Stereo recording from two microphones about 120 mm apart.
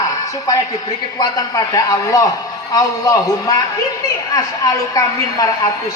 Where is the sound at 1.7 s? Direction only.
30° left (ahead or behind).